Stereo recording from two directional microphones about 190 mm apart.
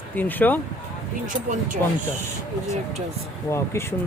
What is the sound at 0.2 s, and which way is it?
Speech, 10° left (ahead or behind).